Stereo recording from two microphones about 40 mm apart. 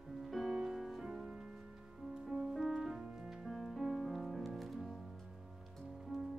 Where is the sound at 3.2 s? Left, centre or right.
Centre.